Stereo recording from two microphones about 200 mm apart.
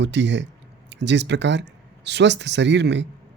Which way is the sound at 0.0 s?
60° right (ahead or behind).